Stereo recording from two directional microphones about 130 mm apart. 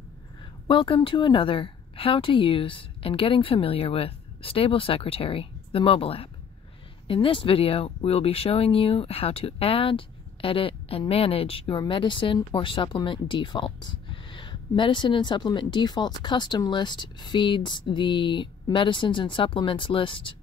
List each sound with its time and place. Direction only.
0.7 s a woman's voice: 40° left (ahead or behind)